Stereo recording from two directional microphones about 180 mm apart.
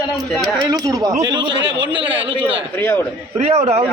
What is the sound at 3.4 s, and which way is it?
Speech, 35° right (ahead or behind).